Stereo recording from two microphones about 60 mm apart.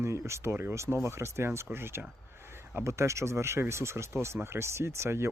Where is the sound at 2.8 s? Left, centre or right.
Right.